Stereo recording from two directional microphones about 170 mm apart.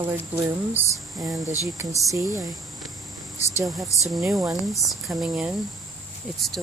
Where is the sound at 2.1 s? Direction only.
20° right (ahead or behind).